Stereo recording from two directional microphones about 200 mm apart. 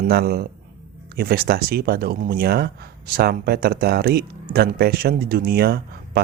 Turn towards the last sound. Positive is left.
turn(degrees=-50)  # may be behind; listen again after turning